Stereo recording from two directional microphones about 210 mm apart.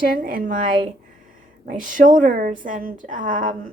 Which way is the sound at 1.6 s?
40° right (ahead or behind).